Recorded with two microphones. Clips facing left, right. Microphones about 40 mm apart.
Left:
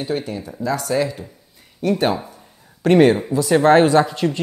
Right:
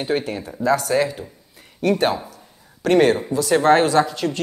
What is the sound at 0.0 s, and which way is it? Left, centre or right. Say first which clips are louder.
Speech: right 1 dB; right.